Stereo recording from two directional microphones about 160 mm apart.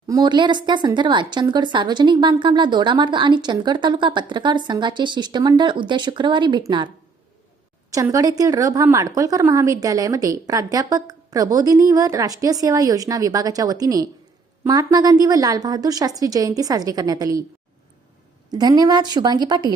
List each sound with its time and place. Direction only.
0.1 s speech: 25° right (ahead or behind)
18.5 s speech: 25° right (ahead or behind)